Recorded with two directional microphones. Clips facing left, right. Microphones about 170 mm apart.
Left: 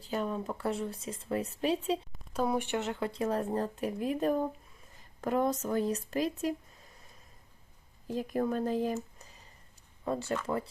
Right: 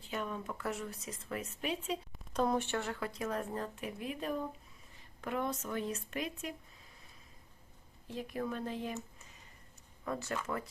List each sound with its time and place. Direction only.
0.0 s speech: 35° left (ahead or behind)
2.3 s speech: 5° left (ahead or behind); by 6.5 s 35° left (ahead or behind)
8.0 s speech: 45° left (ahead or behind)
10.0 s speech: 30° left (ahead or behind)